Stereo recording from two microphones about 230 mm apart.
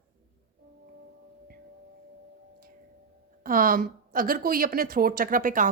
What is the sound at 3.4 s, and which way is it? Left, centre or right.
Speech, right.